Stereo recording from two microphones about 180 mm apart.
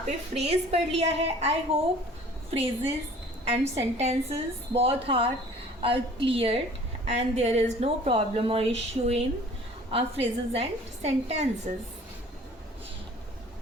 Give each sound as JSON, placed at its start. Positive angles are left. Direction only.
{"t": 0.0, "sound": "a woman's voice", "side_deg": -35}